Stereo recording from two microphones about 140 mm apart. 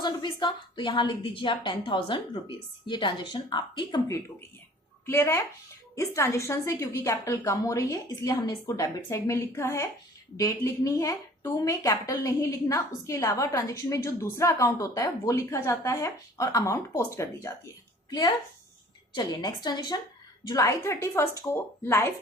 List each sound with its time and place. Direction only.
0.0 s a woman's voice: 30° left (ahead or behind)
5.0 s a woman's voice: 15° left (ahead or behind)